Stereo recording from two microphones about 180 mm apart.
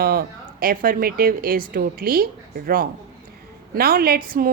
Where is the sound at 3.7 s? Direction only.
55° right (ahead or behind).